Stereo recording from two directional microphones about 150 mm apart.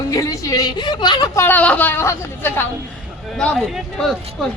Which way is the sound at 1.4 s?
10° left (ahead or behind).